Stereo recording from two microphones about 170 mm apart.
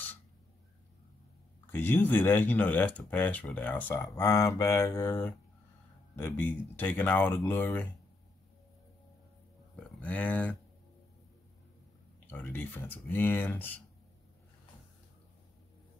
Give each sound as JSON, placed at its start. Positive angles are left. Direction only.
{"t": 1.7, "sound": "speech", "side_deg": 15}
{"t": 6.8, "sound": "speech", "side_deg": 10}
{"t": 9.9, "sound": "speech", "side_deg": 10}
{"t": 12.3, "sound": "speech", "side_deg": 10}